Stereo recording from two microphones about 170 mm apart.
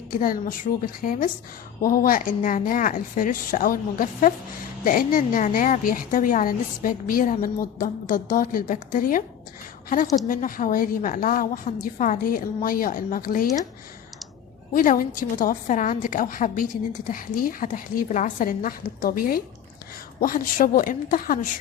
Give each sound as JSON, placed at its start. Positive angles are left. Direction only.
{"t": 0.1, "sound": "a woman's voice", "side_deg": 55}
{"t": 14.7, "sound": "a woman's voice", "side_deg": 55}